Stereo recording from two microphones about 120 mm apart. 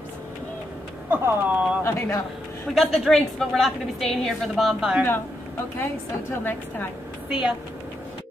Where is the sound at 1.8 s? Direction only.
20° left (ahead or behind).